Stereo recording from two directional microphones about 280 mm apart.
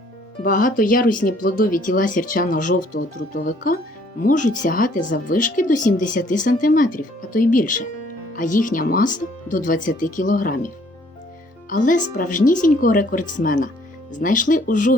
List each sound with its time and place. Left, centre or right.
0.4 s speech: left
11.7 s speech: left